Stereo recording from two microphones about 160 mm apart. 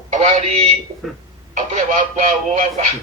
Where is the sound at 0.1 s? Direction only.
50° right (ahead or behind).